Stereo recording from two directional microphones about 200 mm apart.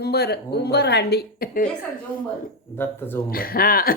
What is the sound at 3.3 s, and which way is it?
Speech, 50° left (ahead or behind).